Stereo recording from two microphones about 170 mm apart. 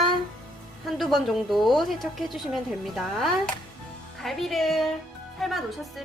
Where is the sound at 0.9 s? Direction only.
Centre (ahead or behind).